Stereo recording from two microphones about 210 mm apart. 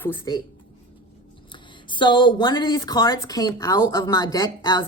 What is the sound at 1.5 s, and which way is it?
A woman's voice, 20° left (ahead or behind).